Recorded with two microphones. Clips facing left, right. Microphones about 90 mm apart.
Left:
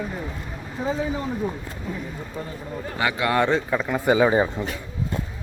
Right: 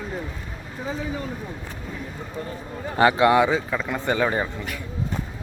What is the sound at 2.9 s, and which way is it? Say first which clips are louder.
Speech: right 7 dB; 30° right (ahead or behind).